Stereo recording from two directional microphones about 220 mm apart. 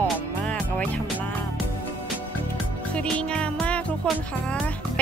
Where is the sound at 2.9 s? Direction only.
5° left (ahead or behind).